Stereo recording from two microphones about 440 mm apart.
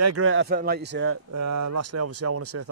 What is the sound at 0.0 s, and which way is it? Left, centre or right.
Speech, right.